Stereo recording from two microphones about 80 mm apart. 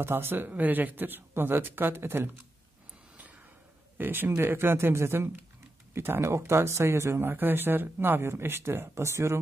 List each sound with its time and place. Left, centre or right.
0.0 s speech: right
4.0 s speech: right